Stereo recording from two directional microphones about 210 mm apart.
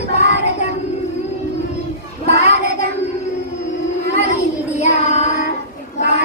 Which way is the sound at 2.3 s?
30° left (ahead or behind).